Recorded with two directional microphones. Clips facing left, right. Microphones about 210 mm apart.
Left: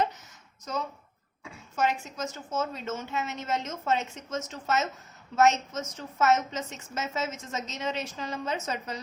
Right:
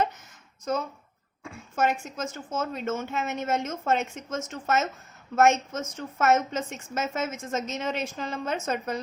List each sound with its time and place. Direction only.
0.7 s a woman's voice: 55° right (ahead or behind)